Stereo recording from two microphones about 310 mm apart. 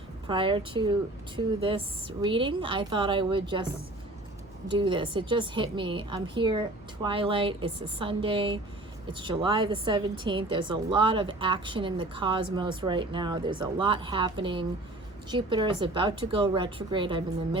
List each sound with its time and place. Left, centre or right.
0.3 s a woman's voice: centre
4.7 s a woman's voice: centre